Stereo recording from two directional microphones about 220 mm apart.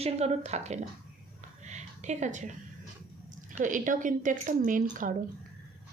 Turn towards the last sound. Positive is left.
turn(degrees=-35)  # may be behind; listen again after turning